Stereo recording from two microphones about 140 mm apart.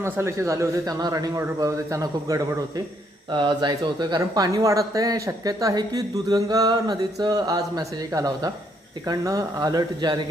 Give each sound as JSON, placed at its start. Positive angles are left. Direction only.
{"t": 0.0, "sound": "speech", "side_deg": -20}